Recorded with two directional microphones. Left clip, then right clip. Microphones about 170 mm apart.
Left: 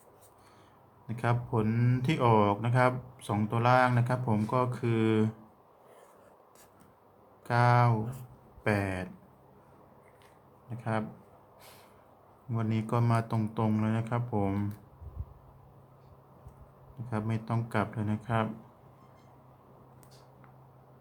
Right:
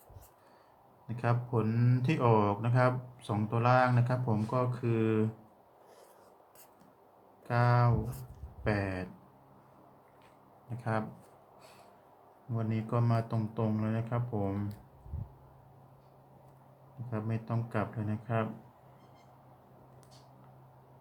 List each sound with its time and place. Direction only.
1.0 s speech: 15° left (ahead or behind)
7.4 s speech: 25° left (ahead or behind)
10.8 s speech: 5° left (ahead or behind)
12.5 s speech: 25° left (ahead or behind)
17.1 s speech: 25° left (ahead or behind)